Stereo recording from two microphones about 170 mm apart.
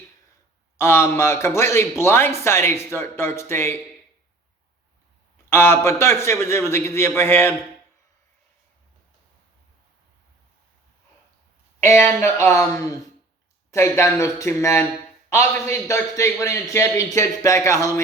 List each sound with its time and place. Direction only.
0.8 s a man's voice: 15° left (ahead or behind)
5.5 s a man's voice: 15° left (ahead or behind)
11.8 s a man's voice: 15° left (ahead or behind)